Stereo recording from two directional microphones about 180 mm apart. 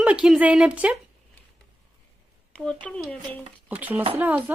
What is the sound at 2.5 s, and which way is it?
Speech, 5° left (ahead or behind).